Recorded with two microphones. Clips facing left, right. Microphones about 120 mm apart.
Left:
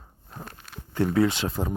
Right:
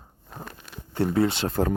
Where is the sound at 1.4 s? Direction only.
60° right (ahead or behind).